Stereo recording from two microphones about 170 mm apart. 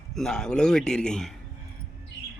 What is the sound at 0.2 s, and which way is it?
Speech, 5° left (ahead or behind).